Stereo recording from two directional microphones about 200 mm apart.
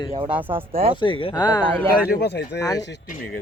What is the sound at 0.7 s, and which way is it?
Speech, 30° right (ahead or behind).